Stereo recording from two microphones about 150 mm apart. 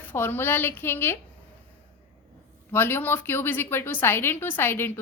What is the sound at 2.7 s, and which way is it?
A woman's voice, 15° left (ahead or behind).